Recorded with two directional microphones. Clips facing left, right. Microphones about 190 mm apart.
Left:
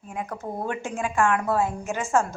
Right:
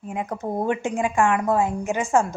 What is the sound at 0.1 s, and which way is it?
A woman's voice, 20° right (ahead or behind).